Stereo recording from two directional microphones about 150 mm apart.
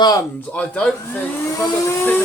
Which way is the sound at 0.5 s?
10° left (ahead or behind).